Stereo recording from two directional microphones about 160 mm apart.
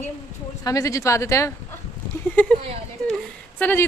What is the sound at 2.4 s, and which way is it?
Speech, 10° left (ahead or behind).